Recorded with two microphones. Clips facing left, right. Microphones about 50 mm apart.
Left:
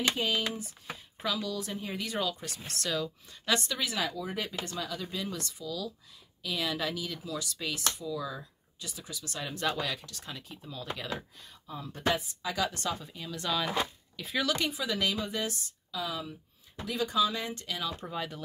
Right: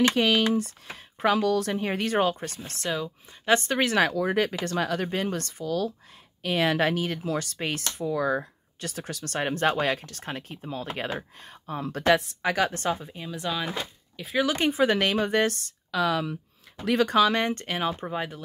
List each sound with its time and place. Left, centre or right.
0.0 s speech: right
0.6 s speech: right
2.8 s speech: right
3.5 s speech: right
3.8 s speech: right
11.6 s speech: right
12.6 s speech: right
13.3 s speech: centre
14.4 s speech: right